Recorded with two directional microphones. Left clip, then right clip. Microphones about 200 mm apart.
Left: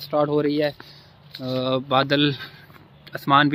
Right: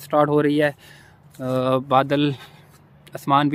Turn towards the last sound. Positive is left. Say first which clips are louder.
# left 1 dB
turn(degrees=-10)  # may be behind; listen again after turning